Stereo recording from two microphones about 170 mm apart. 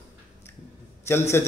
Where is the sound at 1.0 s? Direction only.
15° left (ahead or behind).